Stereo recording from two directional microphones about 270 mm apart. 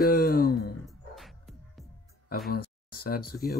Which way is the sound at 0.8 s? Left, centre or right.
Centre.